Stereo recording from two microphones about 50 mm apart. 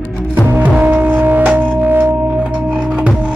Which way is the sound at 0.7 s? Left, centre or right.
Right.